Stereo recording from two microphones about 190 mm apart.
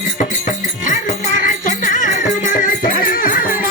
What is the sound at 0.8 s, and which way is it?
Music, 45° left (ahead or behind).